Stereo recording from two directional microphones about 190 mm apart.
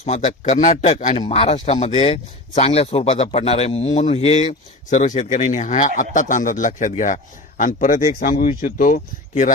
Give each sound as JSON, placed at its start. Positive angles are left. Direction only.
{"t": 0.0, "sound": "speech", "side_deg": 35}